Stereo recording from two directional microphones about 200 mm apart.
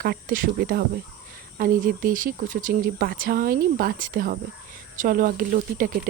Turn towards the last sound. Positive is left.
turn(degrees=-45)  # may be behind; listen again after turning